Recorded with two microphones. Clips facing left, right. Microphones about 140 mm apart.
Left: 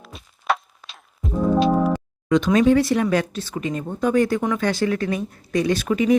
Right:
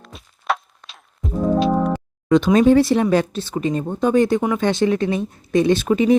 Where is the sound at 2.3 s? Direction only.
30° right (ahead or behind).